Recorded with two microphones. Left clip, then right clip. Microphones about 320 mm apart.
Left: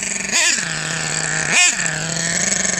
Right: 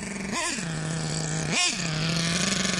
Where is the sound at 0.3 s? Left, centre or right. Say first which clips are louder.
Left 13 dB; left.